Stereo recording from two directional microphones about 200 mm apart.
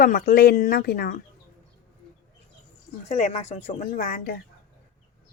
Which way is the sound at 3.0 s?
35° left (ahead or behind).